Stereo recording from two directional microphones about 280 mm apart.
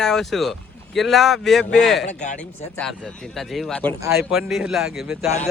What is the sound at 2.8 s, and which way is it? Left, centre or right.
Speech, centre.